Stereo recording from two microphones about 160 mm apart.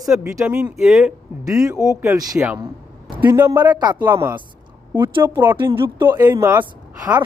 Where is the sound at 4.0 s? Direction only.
15° right (ahead or behind).